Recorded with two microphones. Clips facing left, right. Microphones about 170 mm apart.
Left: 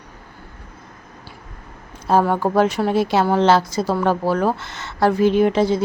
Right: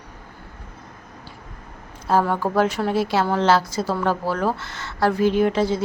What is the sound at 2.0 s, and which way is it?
A woman's voice, 20° left (ahead or behind).